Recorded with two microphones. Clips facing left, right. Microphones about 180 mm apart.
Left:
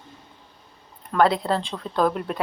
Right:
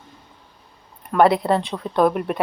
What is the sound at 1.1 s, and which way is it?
Speech, 5° right (ahead or behind).